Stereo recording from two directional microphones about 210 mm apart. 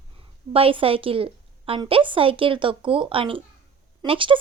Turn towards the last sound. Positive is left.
turn(degrees=-25)  # may be behind; listen again after turning